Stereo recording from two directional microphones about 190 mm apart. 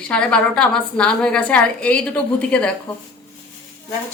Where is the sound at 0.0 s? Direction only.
5° left (ahead or behind).